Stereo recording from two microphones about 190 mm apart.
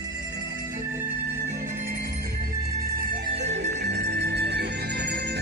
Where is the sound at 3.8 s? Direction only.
65° right (ahead or behind).